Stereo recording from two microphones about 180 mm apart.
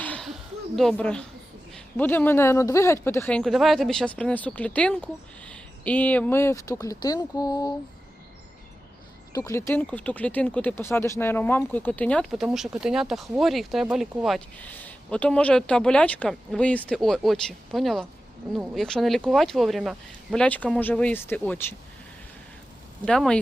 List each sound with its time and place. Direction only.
0.0 s a sound: 5° left (ahead or behind)
0.8 s speech: 5° left (ahead or behind); by 7.7 s 20° left (ahead or behind)
9.3 s speech: 15° left (ahead or behind)
23.0 s speech: 5° left (ahead or behind)